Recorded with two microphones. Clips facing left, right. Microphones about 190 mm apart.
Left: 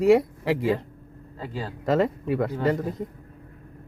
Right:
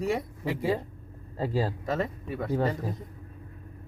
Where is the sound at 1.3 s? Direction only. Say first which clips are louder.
Right 5 dB; 40° right (ahead or behind).